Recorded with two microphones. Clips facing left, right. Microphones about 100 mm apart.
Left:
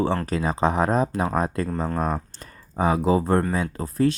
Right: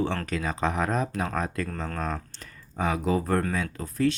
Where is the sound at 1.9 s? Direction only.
15° left (ahead or behind).